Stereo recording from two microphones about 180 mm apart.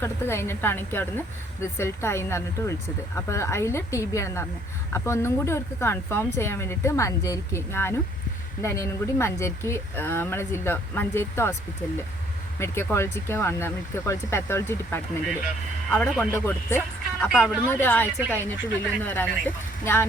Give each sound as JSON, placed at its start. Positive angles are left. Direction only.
{"t": 0.0, "sound": "speech", "side_deg": 15}
{"t": 12.5, "sound": "speech", "side_deg": 15}
{"t": 17.2, "sound": "speech", "side_deg": -5}
{"t": 17.7, "sound": "speech", "side_deg": 10}